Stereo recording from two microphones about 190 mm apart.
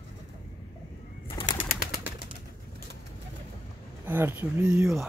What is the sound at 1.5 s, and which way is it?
Bird, 50° left (ahead or behind).